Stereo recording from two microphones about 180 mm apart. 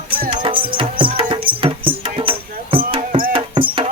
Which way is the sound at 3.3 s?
30° right (ahead or behind).